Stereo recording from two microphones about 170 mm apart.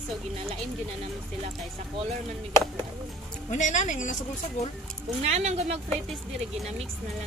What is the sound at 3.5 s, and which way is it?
Speech, 45° left (ahead or behind).